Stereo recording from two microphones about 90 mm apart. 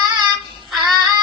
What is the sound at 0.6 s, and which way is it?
Music, centre (ahead or behind).